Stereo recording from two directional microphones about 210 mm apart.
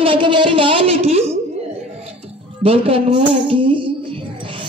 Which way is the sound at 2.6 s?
25° right (ahead or behind).